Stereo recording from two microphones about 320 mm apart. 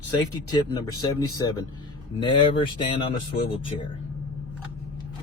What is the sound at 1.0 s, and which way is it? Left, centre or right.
Speech, centre.